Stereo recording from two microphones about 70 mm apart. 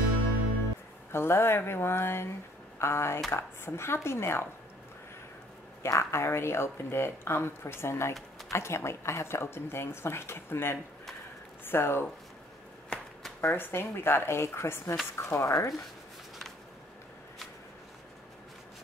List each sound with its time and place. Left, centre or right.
1.1 s speech: left
5.9 s speech: left
12.9 s shuffling cards: centre
13.4 s speech: left